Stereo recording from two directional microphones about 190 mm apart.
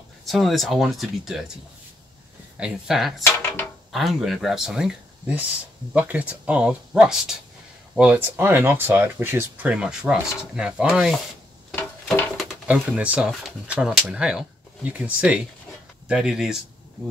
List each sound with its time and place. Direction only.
0.3 s speech: centre (ahead or behind)
11.7 s a sound: 10° left (ahead or behind)
12.4 s speech: 5° right (ahead or behind)